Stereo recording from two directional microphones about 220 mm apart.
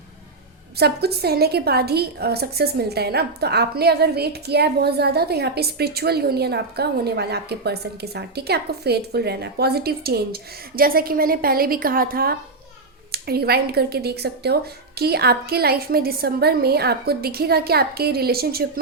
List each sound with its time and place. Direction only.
0.8 s a woman's voice: 45° right (ahead or behind)